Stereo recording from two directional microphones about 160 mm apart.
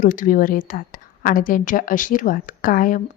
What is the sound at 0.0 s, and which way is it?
A woman's voice, 60° left (ahead or behind).